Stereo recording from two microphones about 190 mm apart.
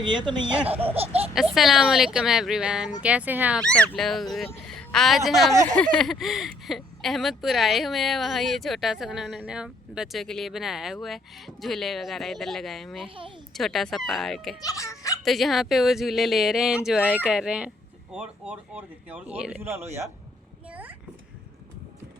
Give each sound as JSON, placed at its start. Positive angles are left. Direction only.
{"t": 0.0, "sound": "speech", "side_deg": -25}
{"t": 1.5, "sound": "speech", "side_deg": 0}
{"t": 3.6, "sound": "speech", "side_deg": 5}
{"t": 14.6, "sound": "speech", "side_deg": 15}
{"t": 15.2, "sound": "speech", "side_deg": 0}
{"t": 17.0, "sound": "speech", "side_deg": 10}
{"t": 17.2, "sound": "speech", "side_deg": -5}
{"t": 20.7, "sound": "a sound", "side_deg": -10}